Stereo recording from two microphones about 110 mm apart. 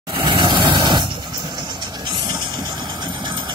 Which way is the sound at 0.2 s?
45° right (ahead or behind).